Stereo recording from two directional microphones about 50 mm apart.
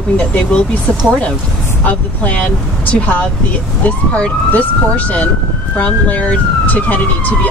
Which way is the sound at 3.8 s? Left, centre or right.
Left.